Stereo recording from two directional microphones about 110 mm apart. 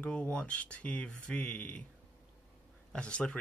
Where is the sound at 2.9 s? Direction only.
10° left (ahead or behind).